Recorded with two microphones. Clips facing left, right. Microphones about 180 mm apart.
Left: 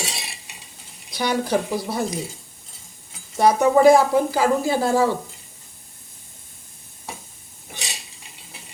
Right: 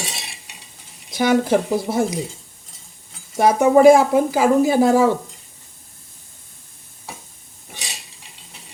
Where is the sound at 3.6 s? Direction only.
20° right (ahead or behind).